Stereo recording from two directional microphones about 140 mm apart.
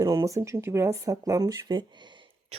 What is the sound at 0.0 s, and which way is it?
Speech, 25° right (ahead or behind).